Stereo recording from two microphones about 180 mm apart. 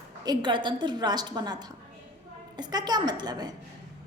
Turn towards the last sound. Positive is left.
turn(degrees=-20)  # may be behind; listen again after turning